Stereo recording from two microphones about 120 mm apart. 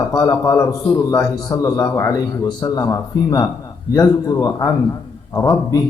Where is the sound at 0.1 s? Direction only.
30° left (ahead or behind).